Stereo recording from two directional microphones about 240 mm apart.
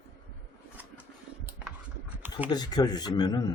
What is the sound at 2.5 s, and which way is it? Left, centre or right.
Speech, centre.